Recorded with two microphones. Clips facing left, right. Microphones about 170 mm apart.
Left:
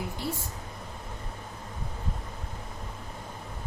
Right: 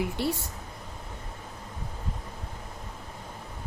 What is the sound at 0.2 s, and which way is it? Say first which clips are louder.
Speech: right 5 dB; 70° right (ahead or behind).